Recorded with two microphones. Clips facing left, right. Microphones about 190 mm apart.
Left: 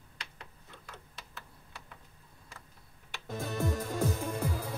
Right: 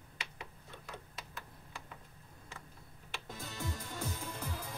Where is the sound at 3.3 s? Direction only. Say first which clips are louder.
Left 11 dB; 55° left (ahead or behind).